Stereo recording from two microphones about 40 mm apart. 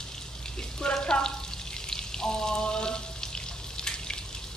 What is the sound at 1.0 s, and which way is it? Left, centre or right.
Frying, left.